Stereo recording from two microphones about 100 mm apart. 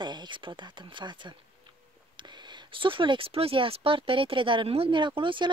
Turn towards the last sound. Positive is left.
turn(degrees=-55)  # may be behind; listen again after turning